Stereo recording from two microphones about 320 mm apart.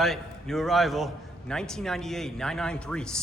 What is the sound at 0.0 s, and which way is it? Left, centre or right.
A man's voice, centre.